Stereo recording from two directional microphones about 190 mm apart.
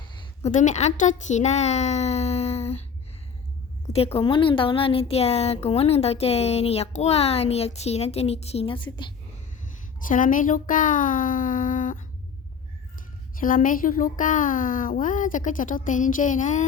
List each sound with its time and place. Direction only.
0.2 s a child's voice: 40° left (ahead or behind)
3.9 s speech: 30° left (ahead or behind)
10.1 s speech: 45° left (ahead or behind)
13.4 s speech: 45° left (ahead or behind)